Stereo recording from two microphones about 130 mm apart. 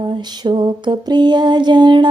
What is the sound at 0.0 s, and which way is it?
Mantra, 35° right (ahead or behind).